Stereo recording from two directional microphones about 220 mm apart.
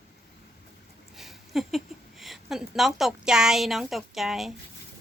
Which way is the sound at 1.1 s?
Centre (ahead or behind).